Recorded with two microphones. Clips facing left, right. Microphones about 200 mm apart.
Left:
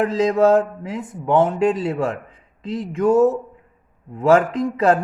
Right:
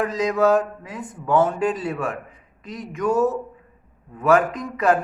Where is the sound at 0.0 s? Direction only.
25° left (ahead or behind).